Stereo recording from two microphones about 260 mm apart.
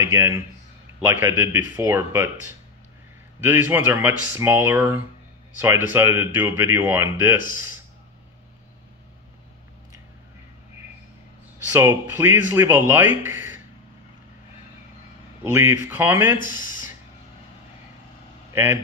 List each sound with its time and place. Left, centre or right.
0.0 s speech: centre
3.4 s speech: centre
11.7 s speech: centre
15.4 s speech: centre
16.3 s speech: left
18.5 s speech: centre